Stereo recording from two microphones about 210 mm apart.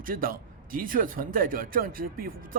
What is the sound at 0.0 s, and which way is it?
Speech, 40° right (ahead or behind).